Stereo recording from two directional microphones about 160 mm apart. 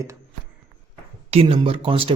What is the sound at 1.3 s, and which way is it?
Speech, 35° right (ahead or behind).